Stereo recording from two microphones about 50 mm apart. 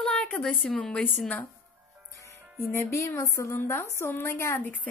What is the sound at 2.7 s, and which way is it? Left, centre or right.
A woman's voice, left.